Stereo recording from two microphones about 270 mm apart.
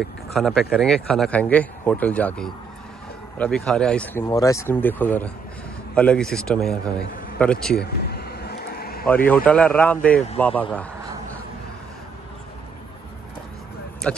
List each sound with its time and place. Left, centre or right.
0.3 s speech: centre
7.8 s a sound: left
9.0 s speech: centre
14.0 s speech: centre